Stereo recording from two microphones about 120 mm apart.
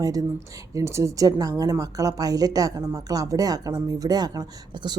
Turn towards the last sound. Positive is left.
turn(degrees=-35)  # may be behind; listen again after turning